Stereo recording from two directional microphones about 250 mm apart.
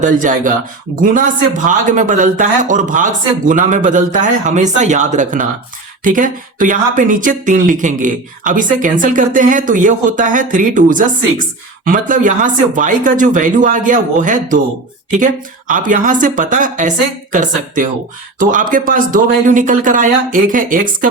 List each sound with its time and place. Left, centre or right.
0.0 s speech: right